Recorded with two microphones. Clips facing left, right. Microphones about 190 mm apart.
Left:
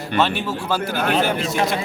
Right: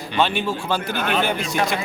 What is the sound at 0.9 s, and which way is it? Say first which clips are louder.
Speech: left 4 dB; 40° left (ahead or behind).